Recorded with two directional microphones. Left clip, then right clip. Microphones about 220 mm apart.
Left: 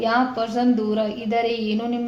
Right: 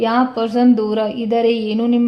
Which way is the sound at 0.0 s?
45° right (ahead or behind).